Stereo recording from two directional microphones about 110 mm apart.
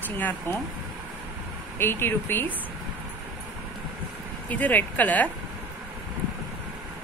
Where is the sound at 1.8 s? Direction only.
20° left (ahead or behind).